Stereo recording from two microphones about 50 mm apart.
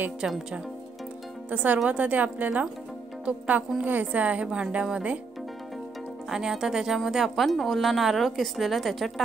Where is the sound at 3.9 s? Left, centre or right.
Right.